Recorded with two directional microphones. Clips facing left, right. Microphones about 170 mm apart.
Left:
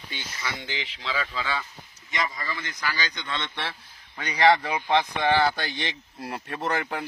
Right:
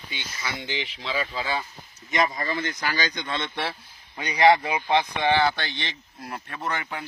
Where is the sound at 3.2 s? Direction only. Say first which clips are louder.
Right 3 dB; 35° right (ahead or behind).